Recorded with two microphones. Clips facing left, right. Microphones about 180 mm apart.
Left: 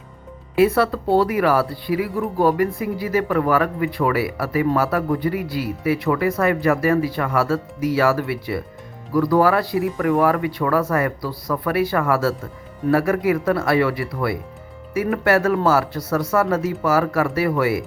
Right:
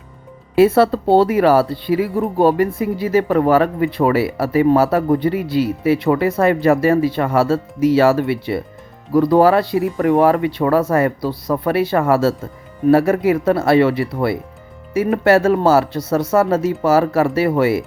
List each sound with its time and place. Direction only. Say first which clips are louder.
0.5 s speech: right 5 dB; 30° right (ahead or behind)